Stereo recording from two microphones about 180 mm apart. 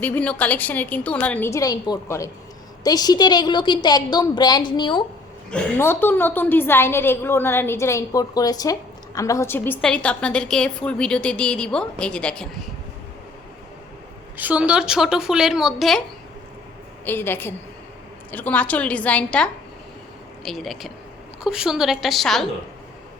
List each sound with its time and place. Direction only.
0.0 s a woman's voice: 10° left (ahead or behind); by 5.0 s 25° left (ahead or behind)
5.5 s a woman's voice: 10° left (ahead or behind)
14.3 s a woman's voice: 10° right (ahead or behind)
17.1 s a woman's voice: 10° left (ahead or behind)